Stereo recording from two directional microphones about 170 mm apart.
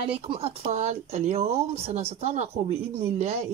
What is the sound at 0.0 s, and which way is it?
Speech, 35° right (ahead or behind).